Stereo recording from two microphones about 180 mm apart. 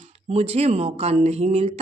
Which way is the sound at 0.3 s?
35° right (ahead or behind).